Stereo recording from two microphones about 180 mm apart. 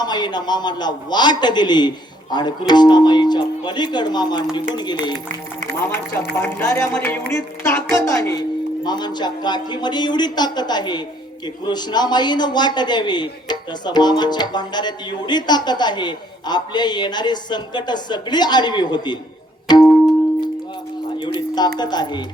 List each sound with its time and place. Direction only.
0.0 s a man's voice: 25° left (ahead or behind)
6.3 s a man's voice: 15° left (ahead or behind)
19.6 s music: 25° left (ahead or behind)
21.2 s a man's voice: 25° left (ahead or behind)